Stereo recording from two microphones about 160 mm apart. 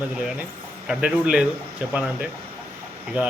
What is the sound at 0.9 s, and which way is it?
Speech, 5° right (ahead or behind).